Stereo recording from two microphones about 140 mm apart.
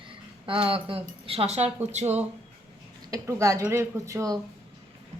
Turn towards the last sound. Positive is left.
turn(degrees=-25)  # may be behind; listen again after turning